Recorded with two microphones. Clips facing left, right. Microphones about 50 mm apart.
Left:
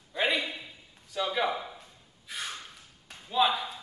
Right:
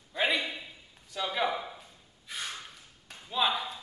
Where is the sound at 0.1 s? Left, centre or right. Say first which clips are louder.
Left 1 dB; centre.